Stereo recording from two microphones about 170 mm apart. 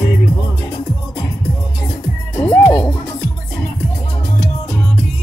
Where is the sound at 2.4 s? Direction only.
10° left (ahead or behind).